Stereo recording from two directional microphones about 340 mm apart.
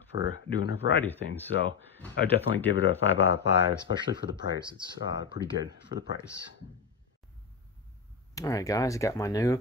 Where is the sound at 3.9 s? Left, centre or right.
Centre.